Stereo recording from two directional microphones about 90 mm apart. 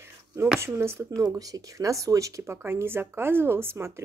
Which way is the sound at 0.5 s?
30° right (ahead or behind).